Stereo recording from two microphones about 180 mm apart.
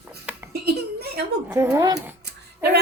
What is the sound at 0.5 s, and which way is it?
Giggle, 60° right (ahead or behind).